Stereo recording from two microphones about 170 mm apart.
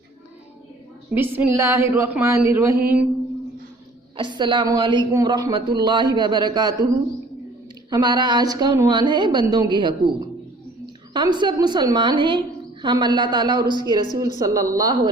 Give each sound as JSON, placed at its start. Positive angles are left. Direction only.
{"t": 1.1, "sound": "speech", "side_deg": -10}
{"t": 4.2, "sound": "a woman's voice", "side_deg": -30}
{"t": 7.9, "sound": "a woman's voice", "side_deg": -25}